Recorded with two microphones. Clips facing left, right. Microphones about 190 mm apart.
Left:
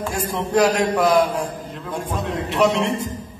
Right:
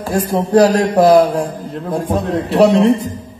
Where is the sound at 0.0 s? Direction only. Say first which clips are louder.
Right 7 dB; 35° right (ahead or behind).